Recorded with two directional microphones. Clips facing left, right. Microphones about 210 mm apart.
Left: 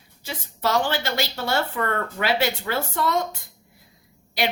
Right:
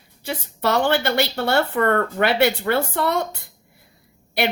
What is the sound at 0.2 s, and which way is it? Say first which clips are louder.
A woman's voice: right 3 dB; 60° right (ahead or behind).